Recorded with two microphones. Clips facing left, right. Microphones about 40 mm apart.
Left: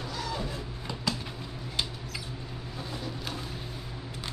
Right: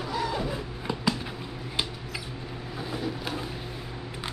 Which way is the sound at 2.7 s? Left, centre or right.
Centre.